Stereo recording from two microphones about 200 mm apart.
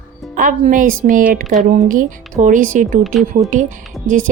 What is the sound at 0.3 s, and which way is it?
A woman's voice, 40° right (ahead or behind).